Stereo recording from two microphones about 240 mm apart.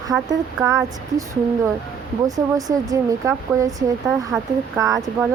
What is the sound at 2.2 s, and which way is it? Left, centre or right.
Speech, centre.